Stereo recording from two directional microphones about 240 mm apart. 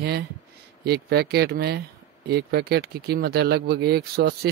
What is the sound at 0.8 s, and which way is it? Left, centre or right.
A man's voice, right.